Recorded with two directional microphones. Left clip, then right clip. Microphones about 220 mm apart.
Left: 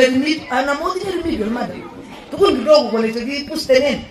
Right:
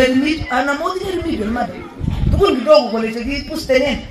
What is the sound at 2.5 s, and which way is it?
Speech, 50° left (ahead or behind).